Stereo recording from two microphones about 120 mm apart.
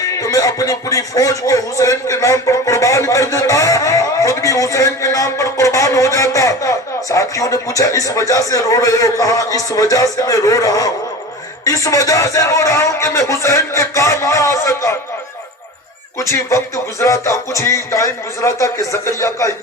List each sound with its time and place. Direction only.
0.0 s a man's voice: 30° left (ahead or behind)
16.3 s a man's voice: 25° left (ahead or behind)